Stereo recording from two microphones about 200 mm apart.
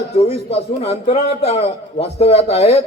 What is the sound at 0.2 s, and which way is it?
A man's voice, 30° left (ahead or behind).